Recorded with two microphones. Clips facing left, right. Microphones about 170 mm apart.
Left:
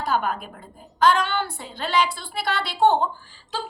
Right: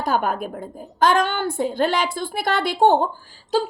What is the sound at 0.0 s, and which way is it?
A woman's voice, 50° right (ahead or behind).